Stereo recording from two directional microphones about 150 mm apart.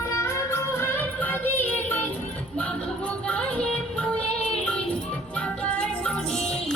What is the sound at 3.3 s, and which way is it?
Music, 5° left (ahead or behind).